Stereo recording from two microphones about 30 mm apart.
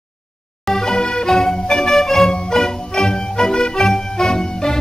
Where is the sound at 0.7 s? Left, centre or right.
Left.